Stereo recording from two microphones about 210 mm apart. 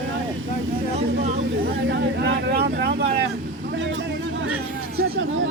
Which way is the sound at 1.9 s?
55° right (ahead or behind).